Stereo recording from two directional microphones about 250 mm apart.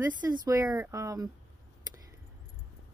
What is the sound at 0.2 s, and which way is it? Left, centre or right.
A woman's voice, centre.